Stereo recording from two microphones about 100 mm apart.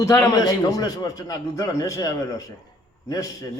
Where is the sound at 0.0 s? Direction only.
30° left (ahead or behind).